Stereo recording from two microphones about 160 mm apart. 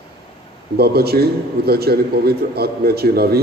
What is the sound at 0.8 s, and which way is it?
A man's voice, 80° right.